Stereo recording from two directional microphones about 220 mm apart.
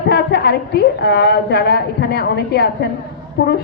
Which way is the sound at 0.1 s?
45° left (ahead or behind).